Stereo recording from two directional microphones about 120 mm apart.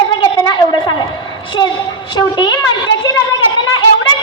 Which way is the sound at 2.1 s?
35° left (ahead or behind).